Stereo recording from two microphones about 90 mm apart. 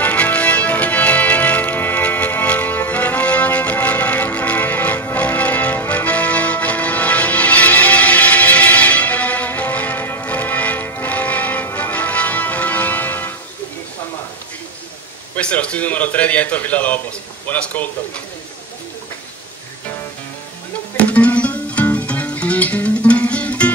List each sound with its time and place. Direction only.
0.0 s music: 15° left (ahead or behind)
15.3 s a man's voice: 15° left (ahead or behind)
20.9 s music: 15° left (ahead or behind)